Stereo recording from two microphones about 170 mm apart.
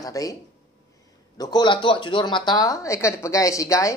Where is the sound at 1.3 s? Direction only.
25° left (ahead or behind).